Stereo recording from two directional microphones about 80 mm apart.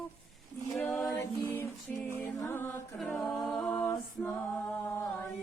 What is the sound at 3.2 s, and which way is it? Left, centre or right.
A capella, centre.